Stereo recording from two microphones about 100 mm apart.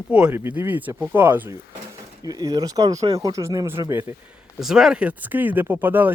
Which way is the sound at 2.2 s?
40° right (ahead or behind).